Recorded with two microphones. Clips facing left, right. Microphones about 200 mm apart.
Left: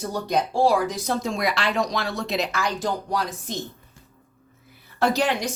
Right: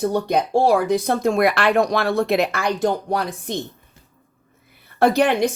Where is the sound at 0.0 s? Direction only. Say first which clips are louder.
Right 5 dB; 60° right (ahead or behind).